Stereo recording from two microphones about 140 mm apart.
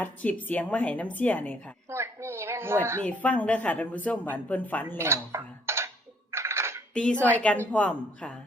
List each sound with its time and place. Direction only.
0.0 s speech: 10° left (ahead or behind)
1.9 s a sound: 20° right (ahead or behind)
3.0 s speech: 10° left (ahead or behind)
4.9 s dishes: 20° right (ahead or behind)
6.3 s coin: 20° right (ahead or behind)
6.9 s speech: 5° left (ahead or behind)